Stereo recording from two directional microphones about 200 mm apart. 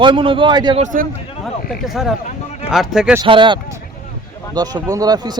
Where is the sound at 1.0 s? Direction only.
45° right (ahead or behind).